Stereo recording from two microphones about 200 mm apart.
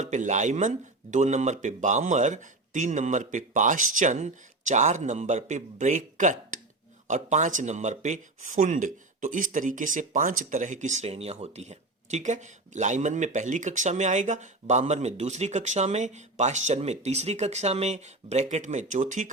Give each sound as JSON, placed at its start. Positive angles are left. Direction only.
{"t": 0.0, "sound": "speech", "side_deg": -35}